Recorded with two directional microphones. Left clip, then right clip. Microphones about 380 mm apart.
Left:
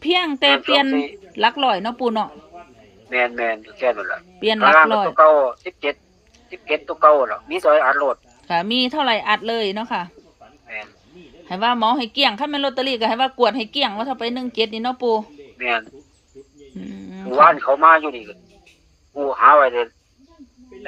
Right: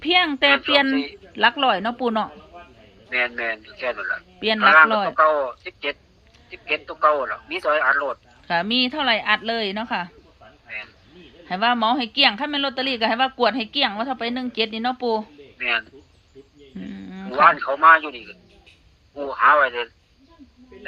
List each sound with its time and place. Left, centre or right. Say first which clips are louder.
0.0 s a woman's voice: even; centre
3.1 s speech: left 3 dB; centre
4.4 s a woman's voice: left 1 dB; centre
5.1 s speech: left 6 dB; centre
8.4 s a woman's voice: left 1 dB; centre
10.7 s a sound: left 2 dB; centre
11.4 s a woman's voice: left 2 dB; centre
15.5 s speech: left 1 dB; centre
16.8 s wild animals: left 1 dB; centre
17.2 s speech: left 4 dB; centre